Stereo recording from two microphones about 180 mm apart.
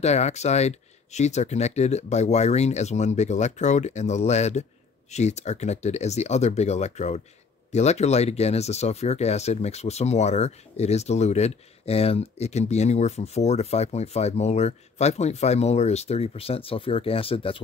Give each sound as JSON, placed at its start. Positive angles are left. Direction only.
{"t": 0.0, "sound": "speech", "side_deg": 40}